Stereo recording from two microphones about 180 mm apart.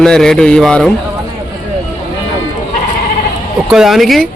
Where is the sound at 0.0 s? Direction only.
5° left (ahead or behind).